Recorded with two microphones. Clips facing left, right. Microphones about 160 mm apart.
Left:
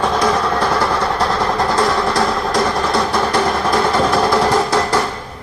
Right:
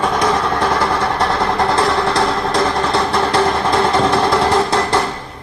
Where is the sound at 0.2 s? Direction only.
25° right (ahead or behind).